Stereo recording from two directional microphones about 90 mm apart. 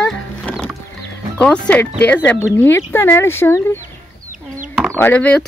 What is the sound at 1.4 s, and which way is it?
Speech, 15° left (ahead or behind).